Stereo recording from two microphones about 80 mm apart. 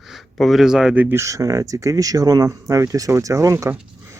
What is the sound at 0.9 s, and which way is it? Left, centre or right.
Speech, right.